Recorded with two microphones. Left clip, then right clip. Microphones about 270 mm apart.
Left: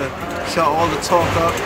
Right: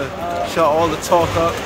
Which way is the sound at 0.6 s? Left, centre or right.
Centre.